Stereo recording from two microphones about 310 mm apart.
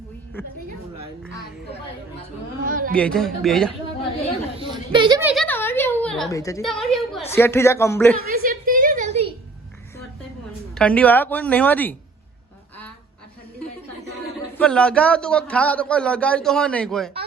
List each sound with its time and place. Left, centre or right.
2.6 s speech: right
2.9 s speech: centre
4.6 s chatter: centre
5.3 s a woman's voice: centre
8.3 s a sound: right
10.8 s speech: centre
14.6 s speech: centre